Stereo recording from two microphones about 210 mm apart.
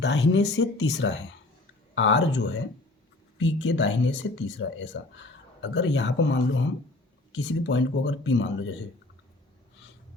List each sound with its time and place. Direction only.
0.0 s speech: 55° left (ahead or behind)